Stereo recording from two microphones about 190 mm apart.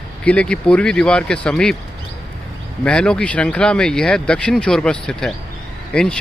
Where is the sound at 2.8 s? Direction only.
5° left (ahead or behind).